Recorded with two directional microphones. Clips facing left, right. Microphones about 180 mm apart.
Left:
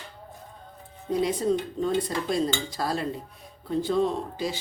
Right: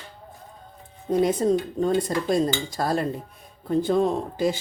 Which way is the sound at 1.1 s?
45° right (ahead or behind).